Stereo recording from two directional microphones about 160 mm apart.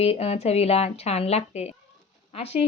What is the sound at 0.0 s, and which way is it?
A woman's voice, 40° left (ahead or behind).